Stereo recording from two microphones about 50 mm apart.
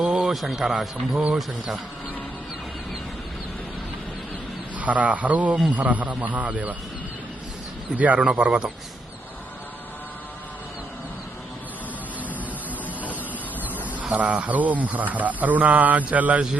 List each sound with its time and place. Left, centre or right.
0.0 s a sound: centre
0.3 s speech: centre
1.1 s a man's voice: centre
4.8 s a man's voice: right
7.9 s a man's voice: right
8.2 s speech: centre
13.6 s a sound: right
14.0 s a man's voice: right